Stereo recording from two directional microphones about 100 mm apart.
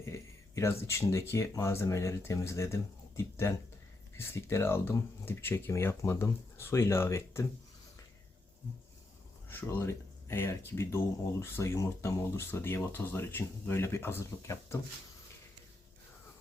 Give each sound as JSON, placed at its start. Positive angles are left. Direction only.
{"t": 0.0, "sound": "speech", "side_deg": 30}
{"t": 9.6, "sound": "speech", "side_deg": 25}